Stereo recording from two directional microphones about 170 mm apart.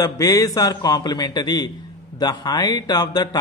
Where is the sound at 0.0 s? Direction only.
20° left (ahead or behind).